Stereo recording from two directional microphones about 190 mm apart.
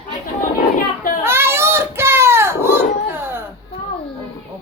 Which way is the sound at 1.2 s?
10° right (ahead or behind).